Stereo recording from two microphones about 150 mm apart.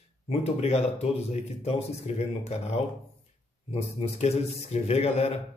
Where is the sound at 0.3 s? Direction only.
45° left (ahead or behind).